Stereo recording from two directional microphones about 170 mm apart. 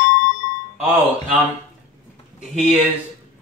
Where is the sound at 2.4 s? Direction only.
5° right (ahead or behind).